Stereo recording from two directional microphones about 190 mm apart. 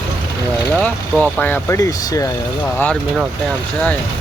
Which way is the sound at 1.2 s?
10° left (ahead or behind).